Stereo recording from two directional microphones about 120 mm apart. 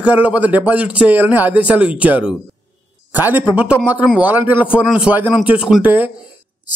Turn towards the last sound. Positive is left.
turn(degrees=-15)  # may be behind; listen again after turning